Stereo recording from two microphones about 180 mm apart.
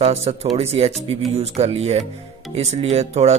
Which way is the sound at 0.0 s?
35° right (ahead or behind).